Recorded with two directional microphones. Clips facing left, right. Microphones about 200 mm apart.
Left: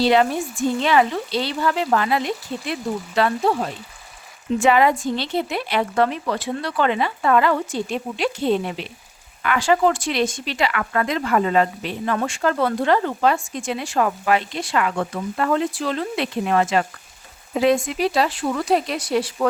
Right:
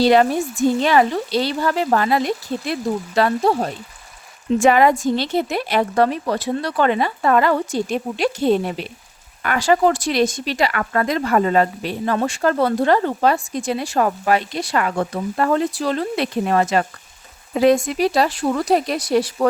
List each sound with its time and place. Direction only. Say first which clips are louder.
0.0 s a woman's voice: right 3 dB; 45° right (ahead or behind)